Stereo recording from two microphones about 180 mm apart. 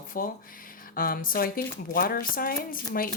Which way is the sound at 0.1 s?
50° left (ahead or behind).